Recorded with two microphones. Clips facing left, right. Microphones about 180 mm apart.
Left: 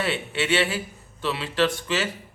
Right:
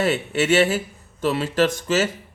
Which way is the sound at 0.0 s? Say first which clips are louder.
Right 6 dB; 45° right (ahead or behind).